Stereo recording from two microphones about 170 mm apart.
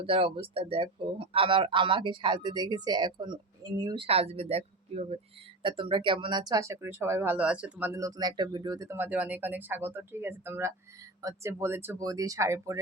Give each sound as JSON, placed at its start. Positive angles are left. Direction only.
{"t": 0.0, "sound": "speech", "side_deg": -35}